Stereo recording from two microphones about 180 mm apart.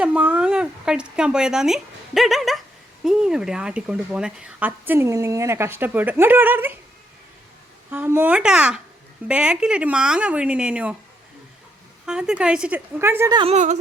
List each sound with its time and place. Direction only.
0.0 s speech: 5° right (ahead or behind)
7.9 s speech: 10° right (ahead or behind)
12.0 s speech: 5° right (ahead or behind)
13.4 s a woman's voice: 40° right (ahead or behind)